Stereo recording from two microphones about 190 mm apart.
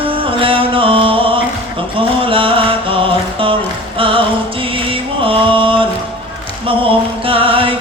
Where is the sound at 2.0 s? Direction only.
25° right (ahead or behind).